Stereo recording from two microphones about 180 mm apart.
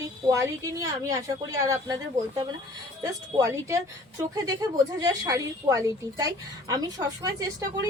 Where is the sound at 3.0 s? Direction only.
15° right (ahead or behind).